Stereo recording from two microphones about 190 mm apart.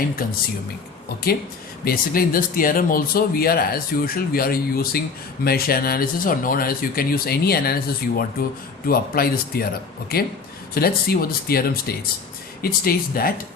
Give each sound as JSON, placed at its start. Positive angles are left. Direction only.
{"t": 0.2, "sound": "speech", "side_deg": 50}
{"t": 1.8, "sound": "speech", "side_deg": 50}